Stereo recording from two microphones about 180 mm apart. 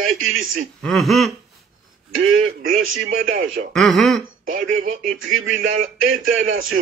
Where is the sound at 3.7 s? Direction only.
Centre (ahead or behind).